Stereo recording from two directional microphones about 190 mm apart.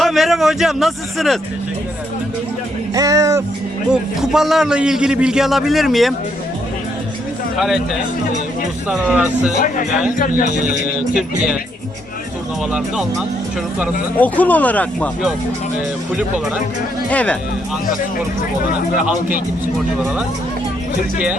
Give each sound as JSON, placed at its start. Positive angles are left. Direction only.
{"t": 0.0, "sound": "a man's voice", "side_deg": 0}
{"t": 2.9, "sound": "speech", "side_deg": -15}
{"t": 3.9, "sound": "a man's voice", "side_deg": -5}
{"t": 8.9, "sound": "a man's voice", "side_deg": -5}
{"t": 9.6, "sound": "speech", "side_deg": 45}
{"t": 12.7, "sound": "a man's voice", "side_deg": 0}
{"t": 14.2, "sound": "speech", "side_deg": 10}
{"t": 17.1, "sound": "speech", "side_deg": 5}